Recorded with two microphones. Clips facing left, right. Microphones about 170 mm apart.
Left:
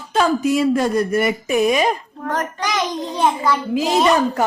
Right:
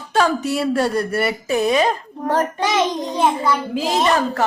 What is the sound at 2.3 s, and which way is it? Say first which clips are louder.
Speech: right 4 dB; 25° right (ahead or behind).